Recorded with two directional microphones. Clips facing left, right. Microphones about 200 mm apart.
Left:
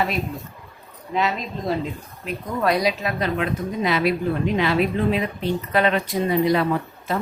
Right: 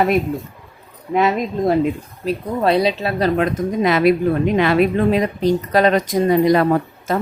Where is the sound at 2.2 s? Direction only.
30° right (ahead or behind); by 7.2 s 50° right (ahead or behind).